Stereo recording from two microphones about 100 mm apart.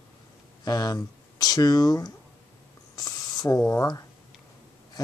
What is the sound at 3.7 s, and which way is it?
Speech, 35° left (ahead or behind).